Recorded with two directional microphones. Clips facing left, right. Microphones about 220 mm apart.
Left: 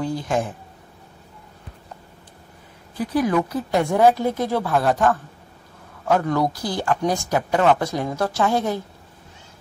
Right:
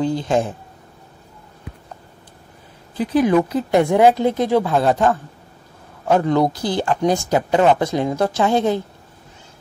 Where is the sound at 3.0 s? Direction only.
25° right (ahead or behind).